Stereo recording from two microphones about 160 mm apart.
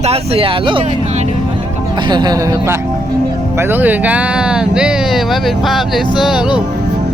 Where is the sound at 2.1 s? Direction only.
25° right (ahead or behind).